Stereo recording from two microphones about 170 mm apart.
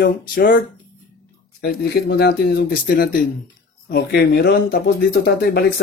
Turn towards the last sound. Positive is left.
turn(degrees=70)  # may be behind; listen again after turning